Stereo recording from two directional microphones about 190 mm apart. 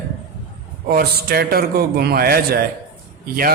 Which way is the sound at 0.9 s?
50° right (ahead or behind).